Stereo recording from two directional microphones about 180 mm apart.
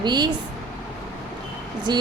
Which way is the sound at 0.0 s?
25° right (ahead or behind).